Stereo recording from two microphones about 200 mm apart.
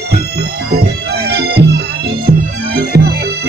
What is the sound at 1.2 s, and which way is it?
Music, 55° right (ahead or behind).